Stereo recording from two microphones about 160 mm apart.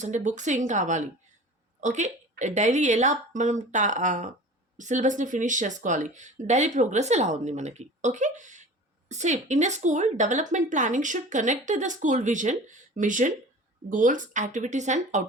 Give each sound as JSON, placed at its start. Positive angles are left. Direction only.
{"t": 0.0, "sound": "speech", "side_deg": -50}